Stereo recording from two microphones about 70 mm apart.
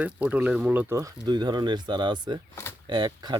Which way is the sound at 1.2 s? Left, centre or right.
Right.